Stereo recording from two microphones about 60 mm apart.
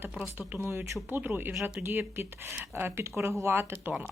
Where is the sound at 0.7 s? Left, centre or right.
Right.